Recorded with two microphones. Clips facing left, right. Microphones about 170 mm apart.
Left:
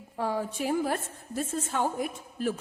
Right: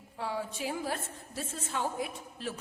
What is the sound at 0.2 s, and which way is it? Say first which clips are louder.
A woman's voice: left 5 dB; 45° left (ahead or behind).